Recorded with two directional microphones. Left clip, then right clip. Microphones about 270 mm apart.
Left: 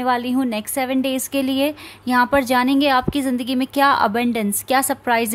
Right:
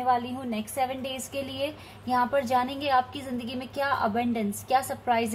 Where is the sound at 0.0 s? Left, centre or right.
Left.